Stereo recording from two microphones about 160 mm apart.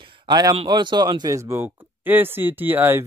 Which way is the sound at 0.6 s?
30° right (ahead or behind).